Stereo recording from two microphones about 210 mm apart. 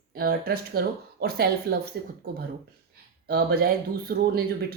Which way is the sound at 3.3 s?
45° right (ahead or behind).